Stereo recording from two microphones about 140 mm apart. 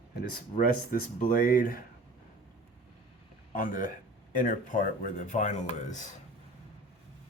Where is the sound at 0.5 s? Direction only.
85° left.